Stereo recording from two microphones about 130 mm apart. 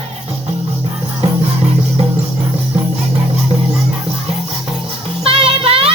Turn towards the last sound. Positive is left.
turn(degrees=-45)  # may be behind; listen again after turning